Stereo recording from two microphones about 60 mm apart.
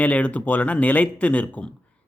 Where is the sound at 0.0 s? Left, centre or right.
Left.